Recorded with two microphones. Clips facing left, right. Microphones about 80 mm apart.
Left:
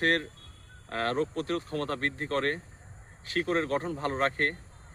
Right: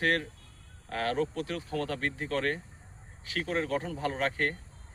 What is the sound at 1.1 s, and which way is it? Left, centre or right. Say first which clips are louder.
Speech: even; left.